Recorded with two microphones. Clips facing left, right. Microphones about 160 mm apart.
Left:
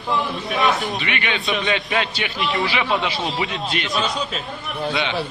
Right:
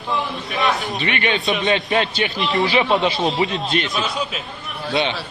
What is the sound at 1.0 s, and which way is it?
A man's voice, 35° right (ahead or behind).